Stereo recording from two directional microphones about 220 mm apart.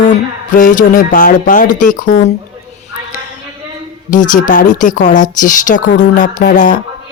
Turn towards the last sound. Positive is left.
turn(degrees=35)  # may be behind; listen again after turning